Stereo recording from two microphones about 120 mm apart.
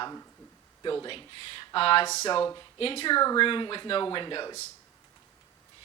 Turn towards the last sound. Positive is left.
turn(degrees=35)  # may be behind; listen again after turning